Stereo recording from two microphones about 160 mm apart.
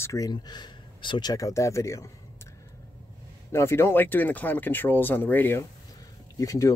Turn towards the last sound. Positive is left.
turn(degrees=20)  # may be behind; listen again after turning